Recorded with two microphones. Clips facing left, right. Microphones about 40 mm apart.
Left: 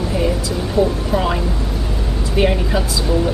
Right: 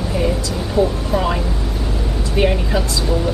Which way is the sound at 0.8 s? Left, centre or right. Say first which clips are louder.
Even; right.